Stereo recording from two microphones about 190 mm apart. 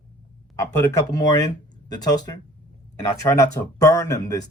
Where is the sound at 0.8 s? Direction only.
20° left (ahead or behind).